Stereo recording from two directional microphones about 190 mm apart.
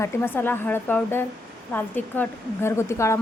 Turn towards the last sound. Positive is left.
turn(degrees=15)  # may be behind; listen again after turning